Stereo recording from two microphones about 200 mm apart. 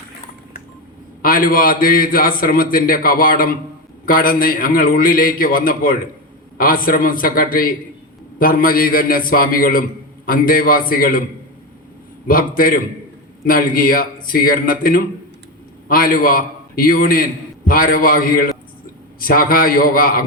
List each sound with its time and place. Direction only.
1.2 s a man's voice: 45° left (ahead or behind)
12.3 s a man's voice: 45° left (ahead or behind)